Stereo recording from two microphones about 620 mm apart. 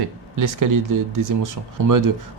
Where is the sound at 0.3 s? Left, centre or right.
Right.